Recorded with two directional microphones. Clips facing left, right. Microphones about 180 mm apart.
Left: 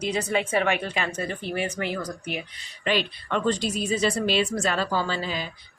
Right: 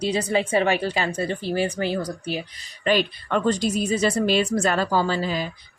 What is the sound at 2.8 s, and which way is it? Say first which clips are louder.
A woman's voice: right 4 dB; 45° right (ahead or behind).